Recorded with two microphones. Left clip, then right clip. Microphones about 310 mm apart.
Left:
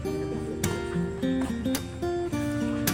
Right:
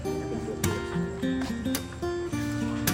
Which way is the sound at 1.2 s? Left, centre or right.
Centre.